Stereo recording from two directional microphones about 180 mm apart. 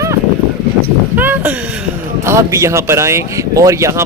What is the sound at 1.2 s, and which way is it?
Speech, 10° right (ahead or behind).